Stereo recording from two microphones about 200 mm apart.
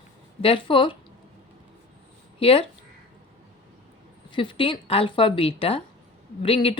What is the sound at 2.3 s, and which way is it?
Speech, 30° left (ahead or behind).